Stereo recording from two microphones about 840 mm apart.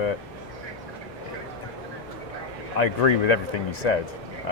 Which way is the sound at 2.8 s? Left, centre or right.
Left.